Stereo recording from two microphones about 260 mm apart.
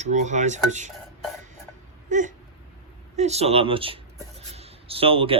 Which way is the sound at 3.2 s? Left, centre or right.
Right.